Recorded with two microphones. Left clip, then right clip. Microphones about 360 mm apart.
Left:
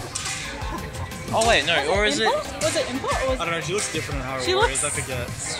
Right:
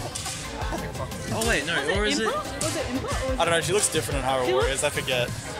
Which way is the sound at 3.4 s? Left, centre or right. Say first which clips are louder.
Right 3 dB; right.